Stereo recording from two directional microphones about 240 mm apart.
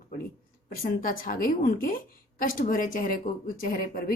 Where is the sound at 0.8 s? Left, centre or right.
Left.